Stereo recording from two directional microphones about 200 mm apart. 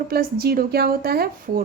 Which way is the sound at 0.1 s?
50° right (ahead or behind).